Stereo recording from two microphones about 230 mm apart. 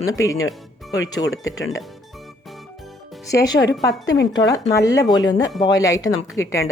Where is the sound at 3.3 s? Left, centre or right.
Centre.